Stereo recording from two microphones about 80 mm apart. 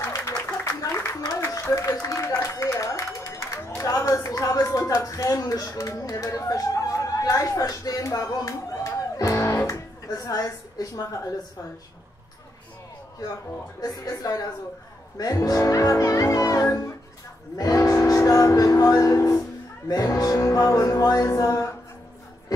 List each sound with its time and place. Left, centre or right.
0.0 s a sound: left
3.8 s speech: left
13.7 s music: left
17.8 s speech: left
19.1 s speech: left
19.9 s music: left